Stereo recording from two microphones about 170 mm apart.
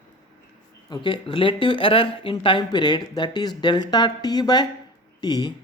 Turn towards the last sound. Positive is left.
turn(degrees=25)  # may be behind; listen again after turning